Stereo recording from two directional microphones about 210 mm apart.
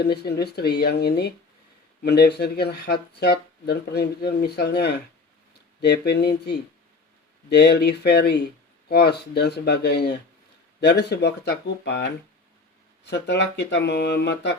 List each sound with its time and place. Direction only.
0.0 s speech: 50° left (ahead or behind)